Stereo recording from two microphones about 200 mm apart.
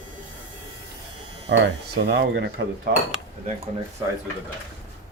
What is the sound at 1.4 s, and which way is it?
Speech, 60° right (ahead or behind).